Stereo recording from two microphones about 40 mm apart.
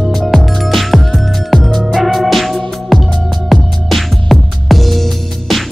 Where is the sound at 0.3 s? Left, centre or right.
Centre.